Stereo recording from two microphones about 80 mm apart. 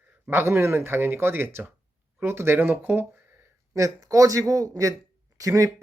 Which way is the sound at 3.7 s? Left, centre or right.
Right.